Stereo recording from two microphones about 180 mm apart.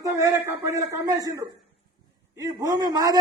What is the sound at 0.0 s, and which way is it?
A man's voice, 15° right (ahead or behind).